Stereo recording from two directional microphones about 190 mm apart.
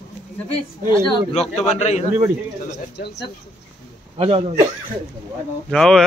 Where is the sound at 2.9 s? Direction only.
60° left (ahead or behind).